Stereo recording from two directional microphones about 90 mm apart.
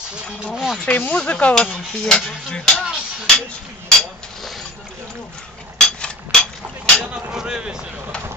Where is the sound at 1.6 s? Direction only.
5° left (ahead or behind).